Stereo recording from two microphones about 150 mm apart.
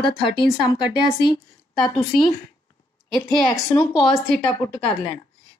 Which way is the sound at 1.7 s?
Centre (ahead or behind).